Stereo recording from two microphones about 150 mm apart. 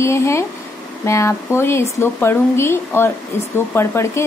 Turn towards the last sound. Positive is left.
turn(degrees=15)  # may be behind; listen again after turning